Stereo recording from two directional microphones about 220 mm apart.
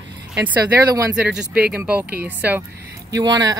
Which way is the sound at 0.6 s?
15° right (ahead or behind).